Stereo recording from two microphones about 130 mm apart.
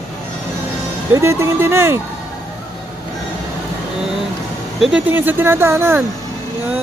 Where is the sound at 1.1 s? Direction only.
20° right (ahead or behind).